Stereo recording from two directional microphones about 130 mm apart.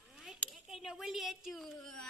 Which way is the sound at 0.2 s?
Centre (ahead or behind).